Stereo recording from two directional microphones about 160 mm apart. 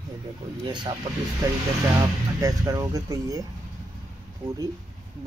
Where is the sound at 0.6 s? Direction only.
30° right (ahead or behind).